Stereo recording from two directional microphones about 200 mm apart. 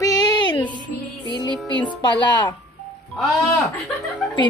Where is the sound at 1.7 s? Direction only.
20° left (ahead or behind).